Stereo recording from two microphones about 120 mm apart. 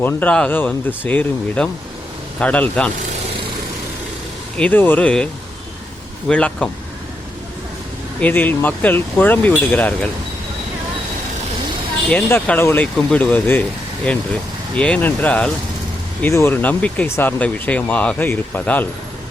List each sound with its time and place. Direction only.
0.0 s speech: 15° left (ahead or behind)
4.5 s speech: 10° left (ahead or behind)
8.2 s speech: 15° left (ahead or behind)
12.5 s speech: 20° left (ahead or behind)
12.8 s speech: 10° left (ahead or behind)